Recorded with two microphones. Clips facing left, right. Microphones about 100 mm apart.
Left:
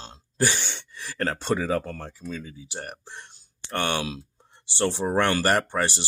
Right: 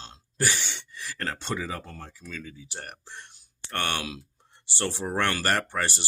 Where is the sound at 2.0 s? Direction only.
25° left (ahead or behind).